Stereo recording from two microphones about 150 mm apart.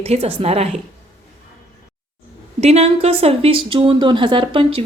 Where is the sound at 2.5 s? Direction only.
45° right (ahead or behind).